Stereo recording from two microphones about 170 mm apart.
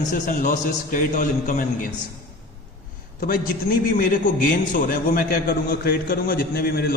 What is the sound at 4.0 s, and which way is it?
A man's voice, 55° left (ahead or behind).